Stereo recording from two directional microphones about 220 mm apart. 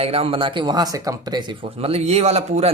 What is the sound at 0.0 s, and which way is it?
Speech, 25° right (ahead or behind).